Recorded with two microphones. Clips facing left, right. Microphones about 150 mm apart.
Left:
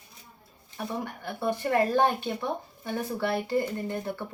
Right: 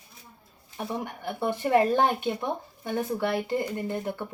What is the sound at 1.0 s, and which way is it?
Speech, 20° right (ahead or behind).